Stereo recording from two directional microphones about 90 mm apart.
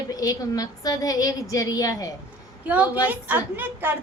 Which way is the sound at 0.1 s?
45° left (ahead or behind).